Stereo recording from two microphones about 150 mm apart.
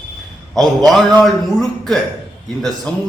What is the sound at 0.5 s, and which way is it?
A man's voice, centre (ahead or behind).